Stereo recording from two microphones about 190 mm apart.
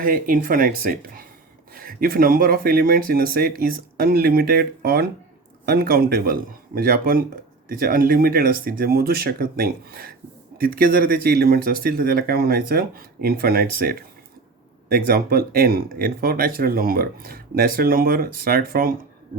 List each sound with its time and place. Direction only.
0.0 s speech: 45° right (ahead or behind)